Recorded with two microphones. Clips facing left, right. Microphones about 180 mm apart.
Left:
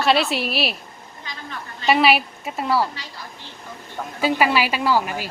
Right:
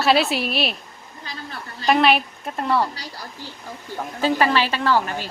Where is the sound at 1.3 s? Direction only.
35° right (ahead or behind).